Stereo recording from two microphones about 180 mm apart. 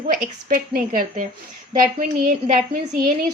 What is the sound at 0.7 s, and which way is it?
Speech, 50° right (ahead or behind).